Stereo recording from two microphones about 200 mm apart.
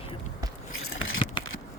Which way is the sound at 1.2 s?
25° left (ahead or behind).